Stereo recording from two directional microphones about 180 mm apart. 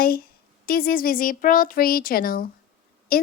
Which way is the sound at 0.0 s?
55° left (ahead or behind).